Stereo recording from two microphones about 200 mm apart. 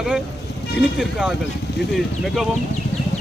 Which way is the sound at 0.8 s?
5° right (ahead or behind).